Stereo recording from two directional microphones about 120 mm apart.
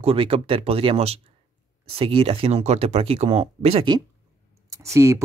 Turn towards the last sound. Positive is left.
turn(degrees=-25)  # may be behind; listen again after turning